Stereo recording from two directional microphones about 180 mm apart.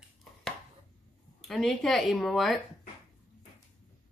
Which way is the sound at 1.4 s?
Centre (ahead or behind).